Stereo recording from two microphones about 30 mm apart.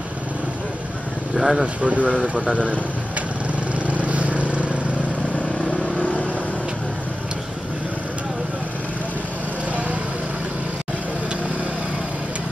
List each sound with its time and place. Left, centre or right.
1.3 s speech: centre
1.8 s speech: right
3.8 s vehicle: right
5.9 s vehicle: left